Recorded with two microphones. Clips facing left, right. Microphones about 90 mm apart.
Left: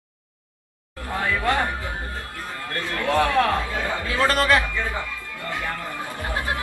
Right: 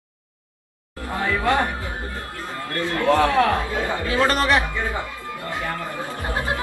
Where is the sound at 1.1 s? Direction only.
20° right (ahead or behind).